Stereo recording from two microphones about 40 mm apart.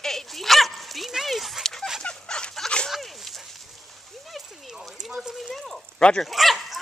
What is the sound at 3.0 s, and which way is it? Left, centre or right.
Dog, centre.